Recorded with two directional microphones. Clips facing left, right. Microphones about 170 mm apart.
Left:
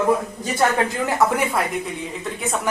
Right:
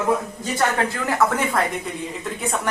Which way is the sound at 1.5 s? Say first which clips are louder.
Even; centre (ahead or behind).